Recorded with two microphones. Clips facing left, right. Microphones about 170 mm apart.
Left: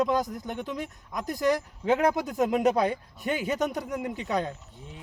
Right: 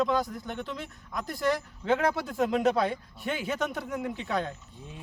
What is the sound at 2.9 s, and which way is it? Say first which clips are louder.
Speech: left 3 dB; 45° left (ahead or behind).